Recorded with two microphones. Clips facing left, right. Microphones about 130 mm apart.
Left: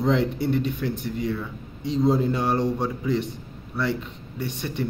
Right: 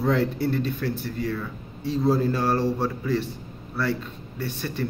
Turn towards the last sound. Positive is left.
turn(degrees=20)  # may be behind; listen again after turning